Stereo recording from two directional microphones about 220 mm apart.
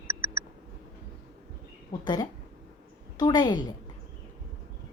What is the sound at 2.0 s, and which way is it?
A woman's voice, 20° left (ahead or behind).